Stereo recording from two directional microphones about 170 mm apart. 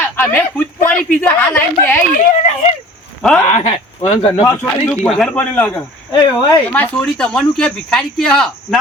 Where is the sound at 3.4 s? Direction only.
40° left (ahead or behind).